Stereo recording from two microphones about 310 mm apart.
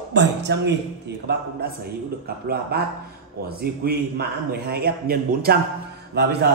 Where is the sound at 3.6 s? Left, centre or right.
Right.